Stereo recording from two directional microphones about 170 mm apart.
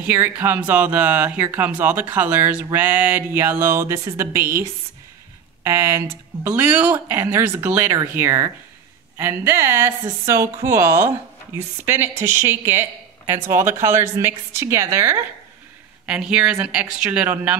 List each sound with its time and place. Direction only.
0.0 s speech: 10° right (ahead or behind)
16.1 s speech: 5° right (ahead or behind)